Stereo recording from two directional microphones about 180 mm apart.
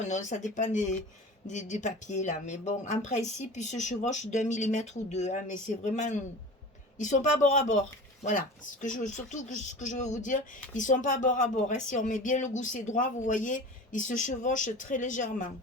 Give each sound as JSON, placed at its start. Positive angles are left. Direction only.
{"t": 0.1, "sound": "speech", "side_deg": 40}